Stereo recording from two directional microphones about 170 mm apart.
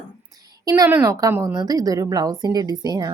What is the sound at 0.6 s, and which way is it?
A child's voice, 20° right (ahead or behind).